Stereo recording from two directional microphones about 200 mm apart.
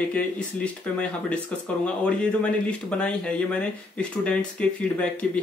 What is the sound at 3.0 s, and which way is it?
Speech, 5° left (ahead or behind).